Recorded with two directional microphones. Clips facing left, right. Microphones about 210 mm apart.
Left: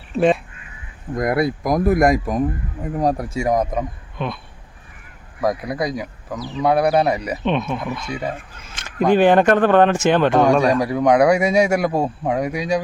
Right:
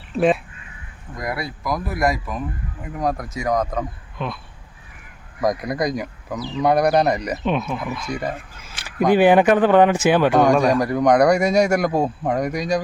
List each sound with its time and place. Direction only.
0.2 s speech: centre (ahead or behind)
1.1 s speech: 50° left (ahead or behind)
2.9 s speech: 35° left (ahead or behind)
4.2 s speech: centre (ahead or behind)
5.4 s speech: 5° left (ahead or behind)
7.4 s a man's voice: 5° right (ahead or behind)
8.7 s speech: 10° right (ahead or behind)
10.6 s a man's voice: 10° left (ahead or behind)